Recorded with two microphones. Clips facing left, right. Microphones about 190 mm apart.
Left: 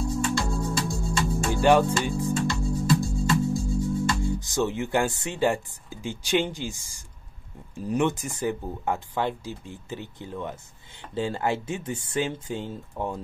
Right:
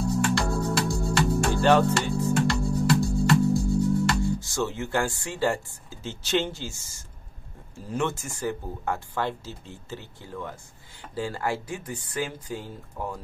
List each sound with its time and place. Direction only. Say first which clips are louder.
0.0 s music: right 2 dB; 70° right (ahead or behind)
1.5 s music: left 2 dB; 15° left (ahead or behind)
2.3 s music: right 2 dB; 65° right (ahead or behind)
4.4 s speech: left 3 dB; 20° left (ahead or behind)